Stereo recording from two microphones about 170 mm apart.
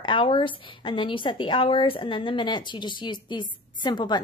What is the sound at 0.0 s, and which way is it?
A woman's voice, 30° left (ahead or behind).